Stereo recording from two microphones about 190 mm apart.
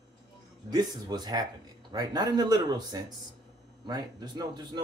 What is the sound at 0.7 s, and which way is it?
Speech, 20° right (ahead or behind).